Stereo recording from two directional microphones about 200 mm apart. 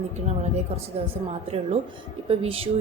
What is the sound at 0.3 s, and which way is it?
A woman's voice, 30° right (ahead or behind).